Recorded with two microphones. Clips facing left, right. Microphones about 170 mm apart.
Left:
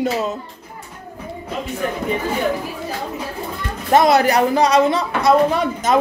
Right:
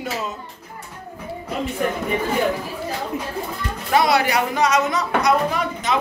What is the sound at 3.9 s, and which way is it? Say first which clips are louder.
Speech: left 5 dB; 45° left (ahead or behind).